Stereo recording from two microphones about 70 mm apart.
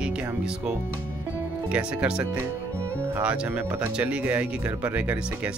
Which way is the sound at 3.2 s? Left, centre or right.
Centre.